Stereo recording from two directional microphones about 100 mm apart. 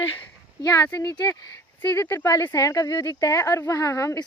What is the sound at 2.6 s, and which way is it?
Speech, 35° left (ahead or behind).